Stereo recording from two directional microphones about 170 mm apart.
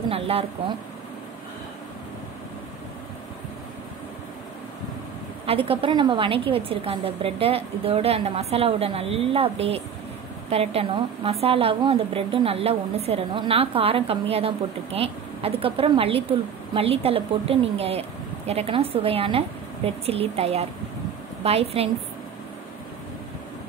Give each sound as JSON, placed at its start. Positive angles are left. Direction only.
{"t": 0.1, "sound": "a woman's voice", "side_deg": -35}
{"t": 5.5, "sound": "a woman's voice", "side_deg": -35}